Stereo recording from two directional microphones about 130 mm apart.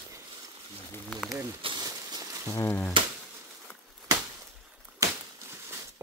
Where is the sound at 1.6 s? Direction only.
35° right (ahead or behind).